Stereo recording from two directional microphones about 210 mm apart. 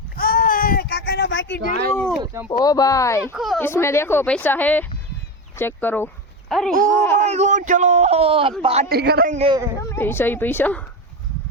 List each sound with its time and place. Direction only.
0.2 s a sound: 40° left (ahead or behind); by 1.6 s 60° left (ahead or behind)
2.2 s speech: 15° right (ahead or behind)
2.6 s speech: 15° left (ahead or behind)
3.3 s speech: centre (ahead or behind)
3.7 s speech: 10° left (ahead or behind)
7.2 s speech: 35° right (ahead or behind)
8.9 s speech: 50° right (ahead or behind)
9.3 s speech: 30° right (ahead or behind)
9.9 s speech: 10° left (ahead or behind)